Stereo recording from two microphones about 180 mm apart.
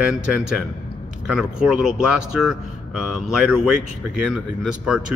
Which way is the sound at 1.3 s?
5° right (ahead or behind).